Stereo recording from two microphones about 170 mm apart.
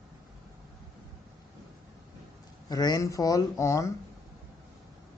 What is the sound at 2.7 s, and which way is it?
Speech, 20° left (ahead or behind).